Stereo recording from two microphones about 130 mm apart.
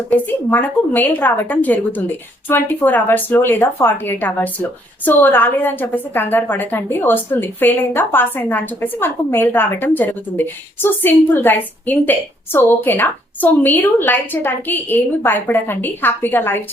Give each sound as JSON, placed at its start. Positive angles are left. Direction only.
{"t": 0.1, "sound": "a woman's voice", "side_deg": 15}